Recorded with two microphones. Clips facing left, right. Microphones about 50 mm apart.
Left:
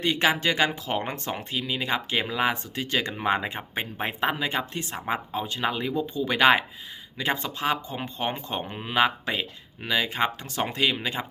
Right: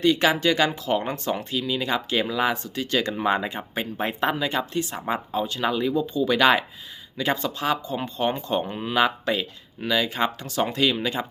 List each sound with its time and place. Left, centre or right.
0.0 s speech: left